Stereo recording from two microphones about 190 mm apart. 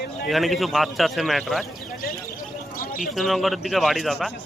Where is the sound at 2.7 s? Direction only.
45° left (ahead or behind).